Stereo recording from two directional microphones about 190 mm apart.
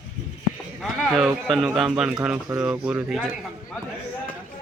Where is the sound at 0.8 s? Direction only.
Centre (ahead or behind).